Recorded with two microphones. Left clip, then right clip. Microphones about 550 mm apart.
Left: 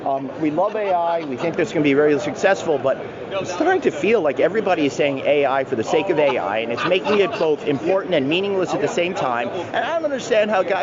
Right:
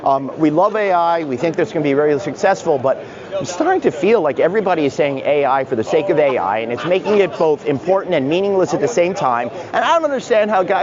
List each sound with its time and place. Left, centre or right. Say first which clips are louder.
0.1 s speech: right 7 dB; right
1.5 s speech: left 1 dB; right
9.8 s speech: right 10 dB; right